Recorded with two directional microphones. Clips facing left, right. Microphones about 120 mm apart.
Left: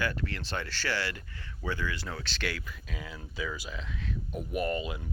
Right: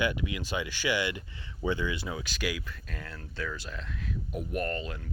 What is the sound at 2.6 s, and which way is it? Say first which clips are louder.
Speech: left 1 dB; 5° left (ahead or behind).